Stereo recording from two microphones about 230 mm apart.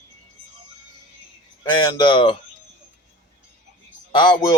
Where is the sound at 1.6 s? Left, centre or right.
Centre.